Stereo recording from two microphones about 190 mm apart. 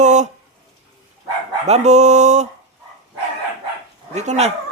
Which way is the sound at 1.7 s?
35° right (ahead or behind).